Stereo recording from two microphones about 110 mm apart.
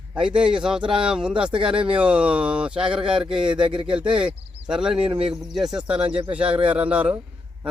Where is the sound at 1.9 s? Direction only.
10° right (ahead or behind).